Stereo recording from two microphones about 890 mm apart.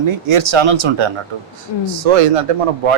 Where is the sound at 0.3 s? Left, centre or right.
Right.